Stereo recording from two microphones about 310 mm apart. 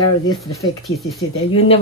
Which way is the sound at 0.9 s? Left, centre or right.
Centre.